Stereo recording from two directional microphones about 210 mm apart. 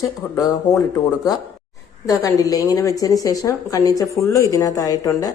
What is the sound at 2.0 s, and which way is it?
A woman's voice, 15° left (ahead or behind).